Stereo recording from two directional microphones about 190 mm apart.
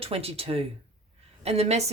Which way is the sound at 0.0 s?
30° right (ahead or behind).